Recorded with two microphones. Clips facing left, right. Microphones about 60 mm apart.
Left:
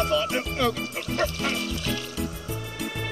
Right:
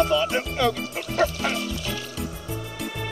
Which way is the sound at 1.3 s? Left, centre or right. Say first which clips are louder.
Right 2 dB; centre.